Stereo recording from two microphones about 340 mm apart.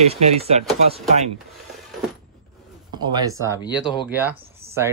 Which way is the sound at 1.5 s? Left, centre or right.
Centre.